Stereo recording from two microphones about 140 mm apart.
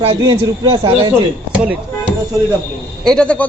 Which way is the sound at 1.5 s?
10° right (ahead or behind).